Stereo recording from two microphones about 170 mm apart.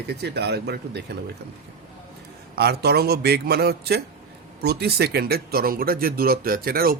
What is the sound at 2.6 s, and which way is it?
Speech, 70° right (ahead or behind).